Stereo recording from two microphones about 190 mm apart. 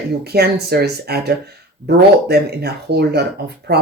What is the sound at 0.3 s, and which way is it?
Speech, 55° right (ahead or behind).